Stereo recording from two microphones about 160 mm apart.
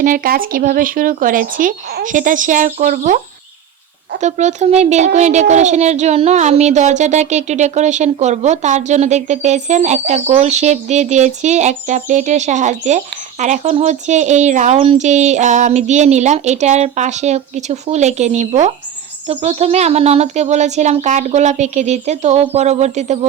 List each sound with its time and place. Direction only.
0.0 s speech: 60° right (ahead or behind)
4.2 s a woman's voice: 45° right (ahead or behind)